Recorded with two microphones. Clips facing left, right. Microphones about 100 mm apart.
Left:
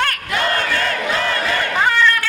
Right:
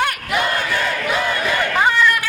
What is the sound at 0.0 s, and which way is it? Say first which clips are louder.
Battle cry: even; 15° right (ahead or behind).